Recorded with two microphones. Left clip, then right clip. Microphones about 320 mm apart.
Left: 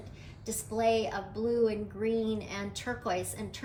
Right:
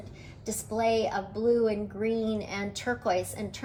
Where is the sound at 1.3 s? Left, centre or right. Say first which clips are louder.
Right 6 dB; centre.